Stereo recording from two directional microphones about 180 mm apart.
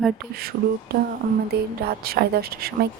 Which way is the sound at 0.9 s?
60° right (ahead or behind).